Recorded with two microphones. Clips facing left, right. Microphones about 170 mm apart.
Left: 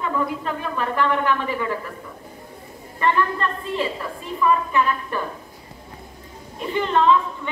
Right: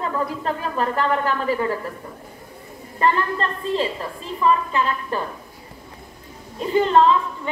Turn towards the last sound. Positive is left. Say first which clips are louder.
# right 2 dB
turn(degrees=-35)  # may be behind; listen again after turning